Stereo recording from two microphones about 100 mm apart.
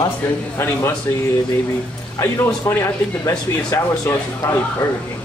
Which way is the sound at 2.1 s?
25° left (ahead or behind).